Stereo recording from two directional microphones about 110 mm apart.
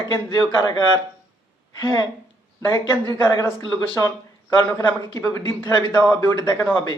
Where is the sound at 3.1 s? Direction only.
30° left (ahead or behind).